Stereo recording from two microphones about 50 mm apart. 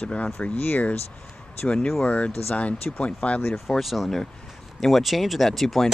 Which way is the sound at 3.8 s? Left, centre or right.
Centre.